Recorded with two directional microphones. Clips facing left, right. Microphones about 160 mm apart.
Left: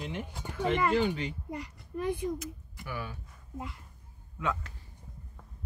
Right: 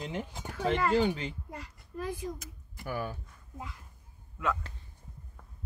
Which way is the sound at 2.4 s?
45° right (ahead or behind).